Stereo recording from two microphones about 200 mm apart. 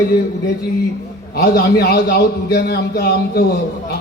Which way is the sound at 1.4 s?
55° left (ahead or behind).